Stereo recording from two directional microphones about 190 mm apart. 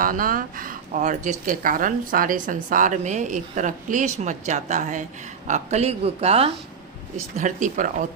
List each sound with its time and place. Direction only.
0.0 s speech: 45° right (ahead or behind)